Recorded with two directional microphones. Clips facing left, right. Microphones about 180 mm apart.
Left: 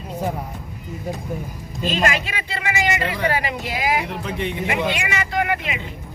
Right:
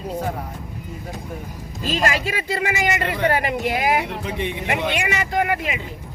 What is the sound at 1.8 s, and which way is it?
A man's voice, 35° right (ahead or behind).